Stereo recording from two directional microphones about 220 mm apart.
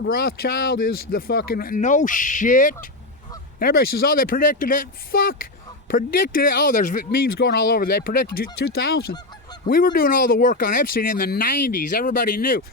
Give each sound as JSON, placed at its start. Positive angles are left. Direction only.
{"t": 0.0, "sound": "speech", "side_deg": 45}
{"t": 8.7, "sound": "goose", "side_deg": 45}
{"t": 9.6, "sound": "speech", "side_deg": 40}